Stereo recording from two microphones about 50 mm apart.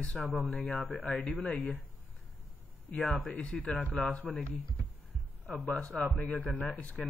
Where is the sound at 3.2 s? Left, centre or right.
Left.